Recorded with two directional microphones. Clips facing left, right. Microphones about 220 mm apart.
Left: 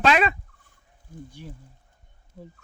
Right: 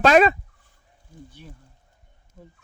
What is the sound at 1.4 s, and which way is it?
Speech, 15° left (ahead or behind).